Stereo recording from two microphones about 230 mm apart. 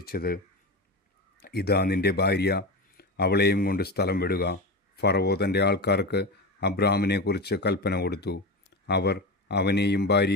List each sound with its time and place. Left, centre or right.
0.0 s speech: left
1.4 s speech: left